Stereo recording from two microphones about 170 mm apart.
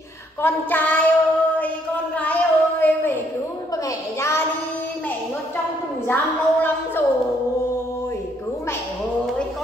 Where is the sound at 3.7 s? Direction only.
20° left (ahead or behind).